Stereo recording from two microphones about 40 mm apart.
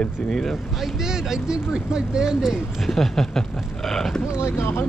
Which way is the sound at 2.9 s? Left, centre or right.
Centre.